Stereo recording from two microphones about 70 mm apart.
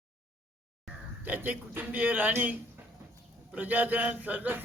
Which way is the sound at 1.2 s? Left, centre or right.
Right.